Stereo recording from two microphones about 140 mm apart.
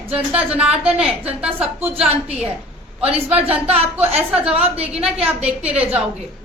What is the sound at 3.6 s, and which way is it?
A woman's voice, 45° right (ahead or behind).